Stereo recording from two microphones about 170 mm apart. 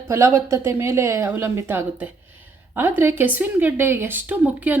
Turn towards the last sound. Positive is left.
turn(degrees=-10)  # may be behind; listen again after turning